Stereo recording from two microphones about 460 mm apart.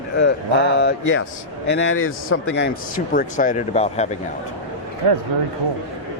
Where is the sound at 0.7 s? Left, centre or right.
Left.